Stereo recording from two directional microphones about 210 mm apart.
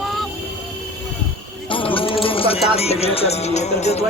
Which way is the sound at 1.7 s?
25° left (ahead or behind).